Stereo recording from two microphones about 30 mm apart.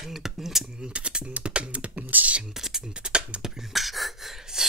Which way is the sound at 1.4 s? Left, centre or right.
Right.